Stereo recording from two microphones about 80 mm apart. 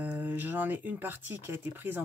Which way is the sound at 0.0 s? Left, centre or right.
Right.